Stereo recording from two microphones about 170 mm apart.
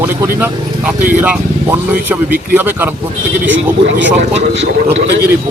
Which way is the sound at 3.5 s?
90° right.